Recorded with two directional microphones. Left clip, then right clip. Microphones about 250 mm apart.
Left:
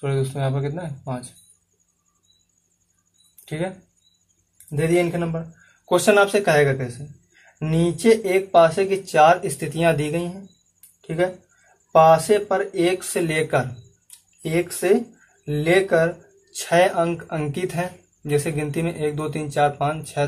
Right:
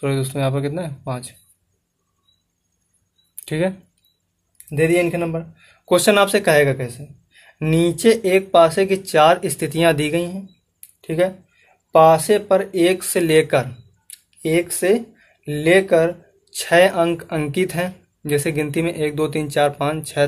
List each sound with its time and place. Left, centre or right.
0.0 s speech: right
3.4 s speech: right
11.0 s a sound: right
11.9 s speech: right